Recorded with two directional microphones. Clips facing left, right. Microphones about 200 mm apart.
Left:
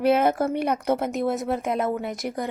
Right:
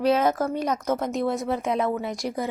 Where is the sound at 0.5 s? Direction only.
60° left (ahead or behind).